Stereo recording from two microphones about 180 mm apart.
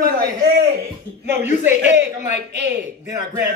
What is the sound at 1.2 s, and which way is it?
Speech, 10° right (ahead or behind).